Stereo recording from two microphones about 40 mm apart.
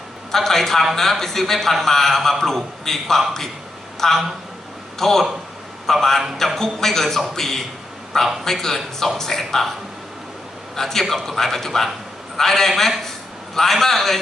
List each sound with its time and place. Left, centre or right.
0.3 s a man's voice: centre
10.8 s a man's voice: centre